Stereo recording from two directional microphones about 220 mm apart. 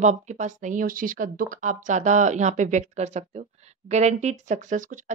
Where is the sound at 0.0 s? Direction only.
35° right (ahead or behind).